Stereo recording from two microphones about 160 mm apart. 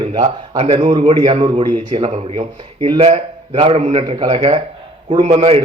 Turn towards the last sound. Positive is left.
turn(degrees=-40)  # may be behind; listen again after turning